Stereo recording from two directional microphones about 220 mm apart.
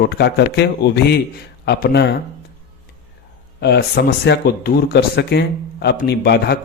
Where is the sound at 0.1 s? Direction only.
50° left (ahead or behind).